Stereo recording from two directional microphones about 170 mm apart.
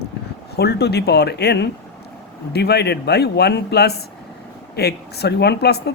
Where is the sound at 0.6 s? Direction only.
70° left (ahead or behind).